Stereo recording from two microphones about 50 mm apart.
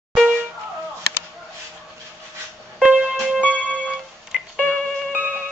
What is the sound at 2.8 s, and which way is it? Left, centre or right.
Keyboard, centre.